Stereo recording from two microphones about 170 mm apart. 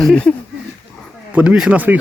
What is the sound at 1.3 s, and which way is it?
Speech, 5° right (ahead or behind).